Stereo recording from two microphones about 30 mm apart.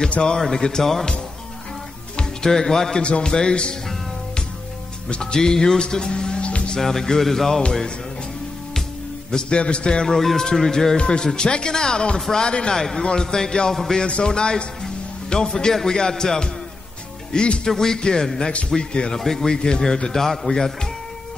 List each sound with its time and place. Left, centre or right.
0.4 s speech: left
2.4 s speech: centre
3.0 s a man's voice: left
5.2 s speech: left
6.8 s speech: centre
9.3 s a man's voice: left
10.0 s speech: centre
11.0 s a man's voice: left
12.7 s speech: centre
13.0 s speech: left
17.3 s speech: left
17.6 s a man's voice: centre
19.1 s speech: centre